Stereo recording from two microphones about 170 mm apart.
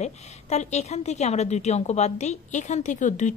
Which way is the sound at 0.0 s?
40° left (ahead or behind).